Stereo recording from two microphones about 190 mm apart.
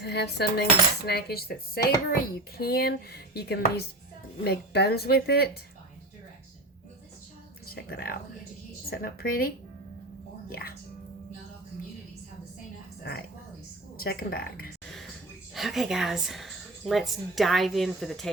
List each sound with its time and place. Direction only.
0.0 s speech: 60° left (ahead or behind)
7.7 s a woman's voice: 55° left (ahead or behind)
10.5 s a woman's voice: 55° left (ahead or behind)
14.0 s a woman's voice: 50° left (ahead or behind)
15.5 s a woman's voice: centre (ahead or behind)